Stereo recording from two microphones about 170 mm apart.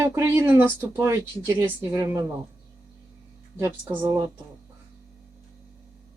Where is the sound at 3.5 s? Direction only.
15° right (ahead or behind).